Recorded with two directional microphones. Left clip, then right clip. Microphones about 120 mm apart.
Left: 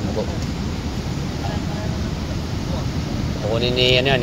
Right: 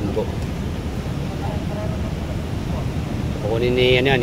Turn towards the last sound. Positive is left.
turn(degrees=-50)  # may be behind; listen again after turning